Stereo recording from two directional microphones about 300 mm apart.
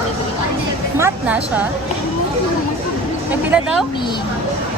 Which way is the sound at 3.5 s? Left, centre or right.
Centre.